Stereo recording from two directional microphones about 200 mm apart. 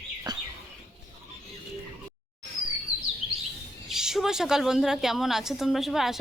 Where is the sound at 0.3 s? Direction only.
20° right (ahead or behind).